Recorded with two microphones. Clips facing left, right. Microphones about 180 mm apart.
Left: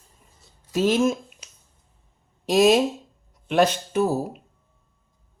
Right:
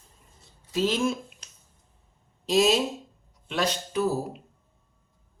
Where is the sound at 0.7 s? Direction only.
50° left (ahead or behind).